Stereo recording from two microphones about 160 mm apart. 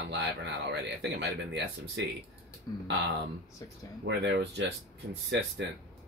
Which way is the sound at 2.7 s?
25° left (ahead or behind).